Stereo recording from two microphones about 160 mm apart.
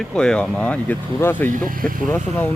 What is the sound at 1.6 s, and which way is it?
Speech, 60° right (ahead or behind).